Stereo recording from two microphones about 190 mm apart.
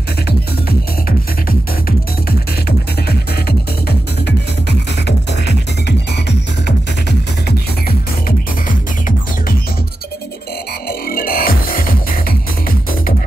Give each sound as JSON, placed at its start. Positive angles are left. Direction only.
{"t": 3.1, "sound": "music", "side_deg": 55}
{"t": 8.3, "sound": "music", "side_deg": 45}
{"t": 10.9, "sound": "music", "side_deg": 50}